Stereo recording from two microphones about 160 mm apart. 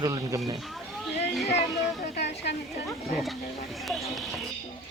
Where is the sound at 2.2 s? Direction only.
90° left.